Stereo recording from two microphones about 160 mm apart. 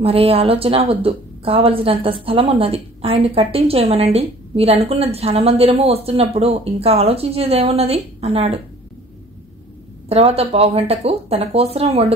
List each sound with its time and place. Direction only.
0.0 s a woman's voice: 40° right (ahead or behind)
10.0 s a woman's voice: 40° right (ahead or behind)